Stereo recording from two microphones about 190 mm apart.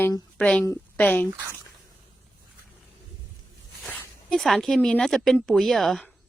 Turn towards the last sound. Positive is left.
turn(degrees=0)  # may be behind; listen again after turning